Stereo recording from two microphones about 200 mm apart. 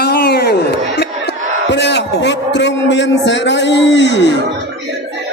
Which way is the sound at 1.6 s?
60° left (ahead or behind).